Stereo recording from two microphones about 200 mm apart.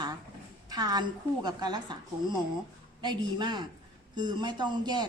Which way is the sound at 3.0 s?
20° right (ahead or behind).